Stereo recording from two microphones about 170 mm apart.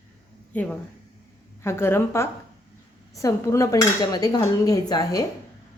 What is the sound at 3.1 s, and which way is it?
Dishes, 20° left (ahead or behind).